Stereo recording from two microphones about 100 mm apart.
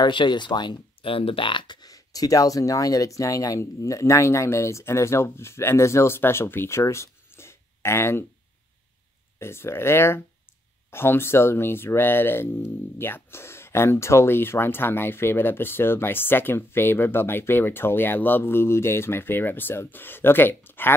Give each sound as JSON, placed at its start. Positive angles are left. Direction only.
{"t": 0.0, "sound": "speech", "side_deg": 50}
{"t": 9.4, "sound": "speech", "side_deg": 25}